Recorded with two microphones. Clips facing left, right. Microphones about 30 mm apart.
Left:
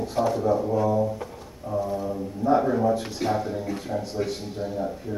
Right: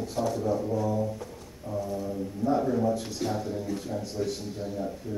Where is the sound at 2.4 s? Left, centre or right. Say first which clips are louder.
Left 5 dB; left.